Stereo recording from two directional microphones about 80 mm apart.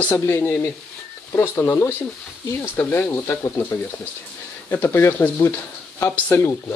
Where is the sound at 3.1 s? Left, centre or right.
Left.